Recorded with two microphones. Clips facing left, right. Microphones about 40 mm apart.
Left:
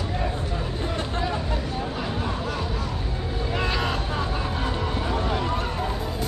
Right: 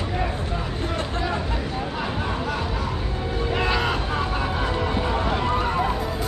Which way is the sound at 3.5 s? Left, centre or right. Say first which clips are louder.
Right 3 dB; centre.